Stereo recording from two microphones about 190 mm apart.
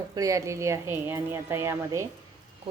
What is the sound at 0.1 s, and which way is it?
A woman's voice, 15° right (ahead or behind).